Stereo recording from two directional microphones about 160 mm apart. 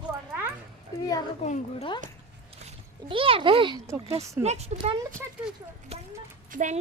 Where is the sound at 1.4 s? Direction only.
40° left (ahead or behind).